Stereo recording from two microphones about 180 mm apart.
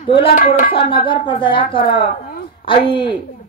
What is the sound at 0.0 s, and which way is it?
Speech, 30° left (ahead or behind).